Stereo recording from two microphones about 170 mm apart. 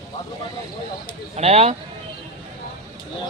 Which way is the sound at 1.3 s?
40° right (ahead or behind).